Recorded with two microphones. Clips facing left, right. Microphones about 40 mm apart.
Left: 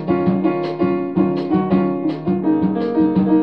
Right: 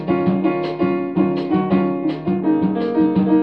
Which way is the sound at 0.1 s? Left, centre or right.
Right.